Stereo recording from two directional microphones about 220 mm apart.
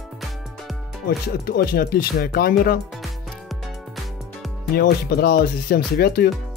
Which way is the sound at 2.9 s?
Centre (ahead or behind).